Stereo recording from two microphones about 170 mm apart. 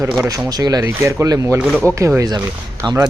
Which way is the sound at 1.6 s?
Centre (ahead or behind).